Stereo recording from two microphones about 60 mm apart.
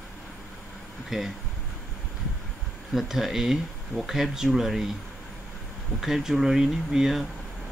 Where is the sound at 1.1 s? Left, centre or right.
Centre.